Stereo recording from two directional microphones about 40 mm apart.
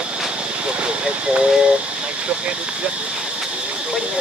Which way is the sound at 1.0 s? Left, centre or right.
Right.